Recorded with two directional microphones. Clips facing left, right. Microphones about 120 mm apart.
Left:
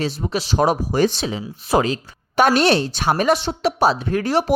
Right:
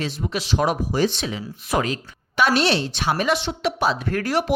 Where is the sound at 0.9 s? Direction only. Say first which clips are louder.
Left 3 dB; 50° left (ahead or behind).